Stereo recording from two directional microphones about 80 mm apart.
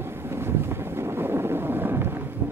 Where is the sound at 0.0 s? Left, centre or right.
Right.